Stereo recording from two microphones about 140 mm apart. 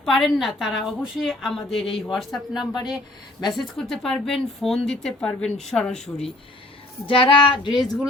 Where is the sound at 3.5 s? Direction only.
Centre (ahead or behind).